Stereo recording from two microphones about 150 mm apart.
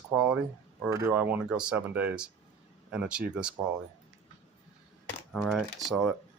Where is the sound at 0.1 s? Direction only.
5° right (ahead or behind).